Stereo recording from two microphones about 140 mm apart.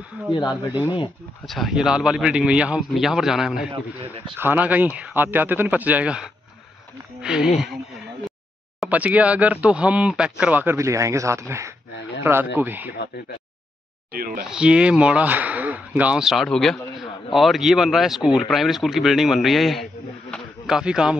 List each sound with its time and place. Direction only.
0.3 s speech: 30° left (ahead or behind)
1.4 s speech: centre (ahead or behind)
3.7 s speech: 40° right (ahead or behind)
4.4 s speech: 15° right (ahead or behind)
8.7 s speech: 10° right (ahead or behind)
14.1 s speech: 90° right
14.4 s speech: 5° right (ahead or behind)